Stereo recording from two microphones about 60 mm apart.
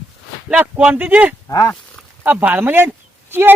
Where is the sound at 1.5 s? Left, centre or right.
Left.